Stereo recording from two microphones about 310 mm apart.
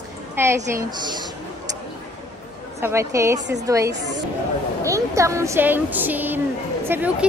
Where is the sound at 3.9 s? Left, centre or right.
Right.